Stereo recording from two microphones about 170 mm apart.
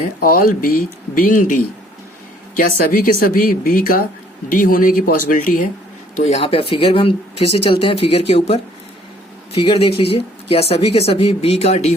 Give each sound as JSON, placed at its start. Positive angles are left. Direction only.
{"t": 0.2, "sound": "speech", "side_deg": 55}
{"t": 6.1, "sound": "speech", "side_deg": 40}